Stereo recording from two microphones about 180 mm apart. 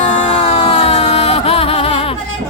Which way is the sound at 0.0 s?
35° left (ahead or behind).